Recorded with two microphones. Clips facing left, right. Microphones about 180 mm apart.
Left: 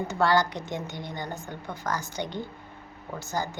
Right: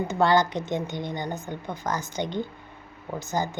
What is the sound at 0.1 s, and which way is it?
A woman's voice, 20° right (ahead or behind).